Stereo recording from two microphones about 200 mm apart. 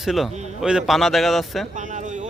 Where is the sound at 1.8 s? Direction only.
40° right (ahead or behind).